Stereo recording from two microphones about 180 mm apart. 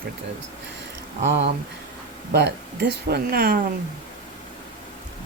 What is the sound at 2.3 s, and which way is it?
Speech, 65° right (ahead or behind).